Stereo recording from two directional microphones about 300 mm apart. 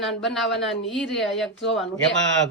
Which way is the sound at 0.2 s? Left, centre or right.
Centre.